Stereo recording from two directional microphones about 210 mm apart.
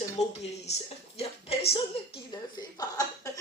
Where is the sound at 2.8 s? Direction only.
15° left (ahead or behind).